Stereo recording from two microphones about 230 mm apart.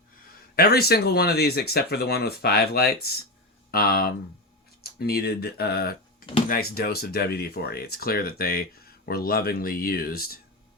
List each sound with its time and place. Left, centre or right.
0.5 s speech: left